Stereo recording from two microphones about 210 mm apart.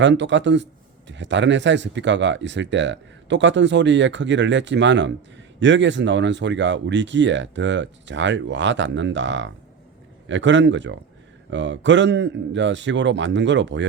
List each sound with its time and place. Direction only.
0.0 s speech: 60° right (ahead or behind)